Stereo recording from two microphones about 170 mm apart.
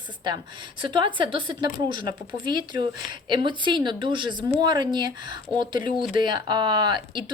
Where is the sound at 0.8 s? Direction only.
30° right (ahead or behind).